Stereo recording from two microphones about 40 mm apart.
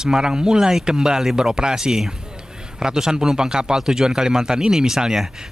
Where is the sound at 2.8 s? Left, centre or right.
Centre.